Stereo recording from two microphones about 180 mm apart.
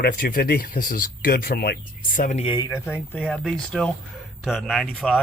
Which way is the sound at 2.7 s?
15° left (ahead or behind).